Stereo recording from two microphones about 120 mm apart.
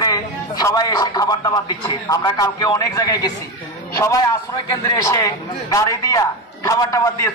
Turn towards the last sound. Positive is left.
turn(degrees=25)  # may be behind; listen again after turning